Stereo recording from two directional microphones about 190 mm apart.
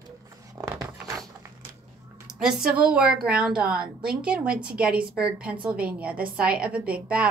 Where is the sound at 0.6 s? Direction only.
15° right (ahead or behind).